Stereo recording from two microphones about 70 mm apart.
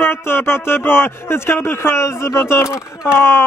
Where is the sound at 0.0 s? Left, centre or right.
Left.